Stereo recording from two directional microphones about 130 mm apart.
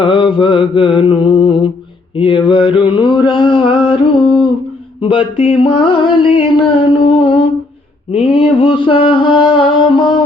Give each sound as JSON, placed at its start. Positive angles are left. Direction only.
{"t": 0.0, "sound": "mantra", "side_deg": 40}